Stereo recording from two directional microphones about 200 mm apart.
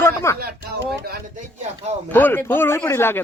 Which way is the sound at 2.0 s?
10° left (ahead or behind).